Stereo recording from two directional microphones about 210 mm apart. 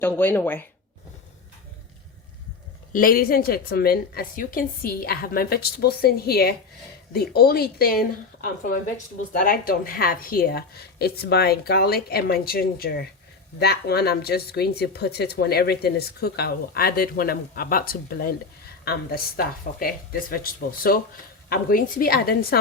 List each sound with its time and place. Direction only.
0.0 s speech: 10° left (ahead or behind)
2.9 s speech: 45° left (ahead or behind)
19.8 s speech: 45° left (ahead or behind)